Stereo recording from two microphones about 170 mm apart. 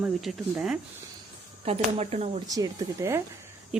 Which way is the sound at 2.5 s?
20° right (ahead or behind).